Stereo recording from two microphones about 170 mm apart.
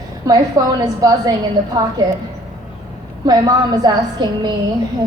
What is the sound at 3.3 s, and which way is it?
A woman's voice, 25° right (ahead or behind).